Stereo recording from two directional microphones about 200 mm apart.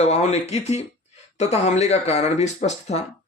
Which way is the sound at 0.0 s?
35° left (ahead or behind).